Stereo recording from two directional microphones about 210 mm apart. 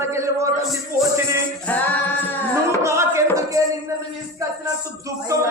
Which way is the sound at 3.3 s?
15° right (ahead or behind).